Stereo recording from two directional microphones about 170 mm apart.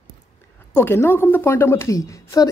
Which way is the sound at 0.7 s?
15° left (ahead or behind).